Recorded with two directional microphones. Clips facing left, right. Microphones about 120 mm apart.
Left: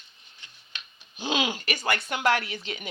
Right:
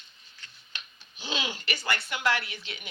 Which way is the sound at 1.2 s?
50° left (ahead or behind).